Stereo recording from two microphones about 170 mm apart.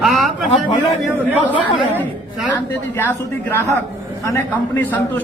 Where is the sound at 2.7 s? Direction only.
10° left (ahead or behind).